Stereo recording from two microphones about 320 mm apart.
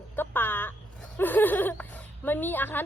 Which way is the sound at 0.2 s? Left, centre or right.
Centre.